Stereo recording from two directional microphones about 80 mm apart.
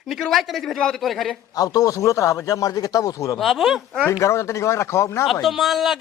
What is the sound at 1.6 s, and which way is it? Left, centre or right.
Speech, left.